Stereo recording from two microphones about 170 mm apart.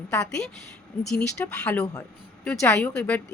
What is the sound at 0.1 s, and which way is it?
A woman's voice, 5° left (ahead or behind).